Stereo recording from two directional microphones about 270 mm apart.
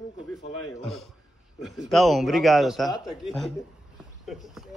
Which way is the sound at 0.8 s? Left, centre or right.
Centre.